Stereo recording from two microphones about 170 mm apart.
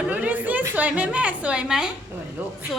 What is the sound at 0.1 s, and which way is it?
A woman's voice, 10° right (ahead or behind).